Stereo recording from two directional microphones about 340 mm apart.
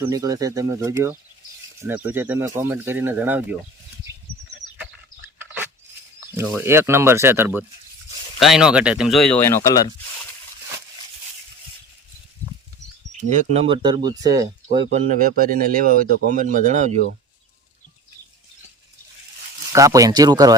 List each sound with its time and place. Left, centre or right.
0.0 s speech: centre
6.1 s speech: centre
13.3 s speech: centre
14.9 s speech: right
19.7 s speech: centre